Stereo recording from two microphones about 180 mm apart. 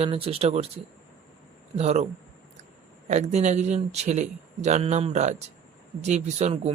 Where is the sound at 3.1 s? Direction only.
40° right (ahead or behind).